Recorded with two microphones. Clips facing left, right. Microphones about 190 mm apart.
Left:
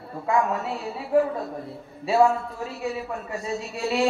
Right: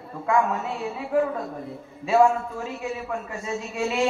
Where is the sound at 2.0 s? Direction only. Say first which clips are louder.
Right 1 dB; 35° left (ahead or behind).